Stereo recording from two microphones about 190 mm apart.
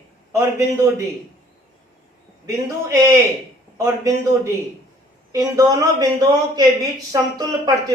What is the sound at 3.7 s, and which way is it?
A man's voice, 15° right (ahead or behind).